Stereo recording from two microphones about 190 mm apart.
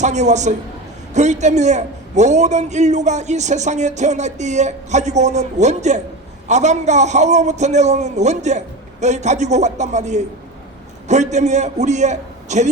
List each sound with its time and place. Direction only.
0.0 s a man's voice: 40° right (ahead or behind)